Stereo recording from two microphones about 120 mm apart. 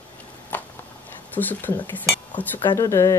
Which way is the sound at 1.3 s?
15° left (ahead or behind).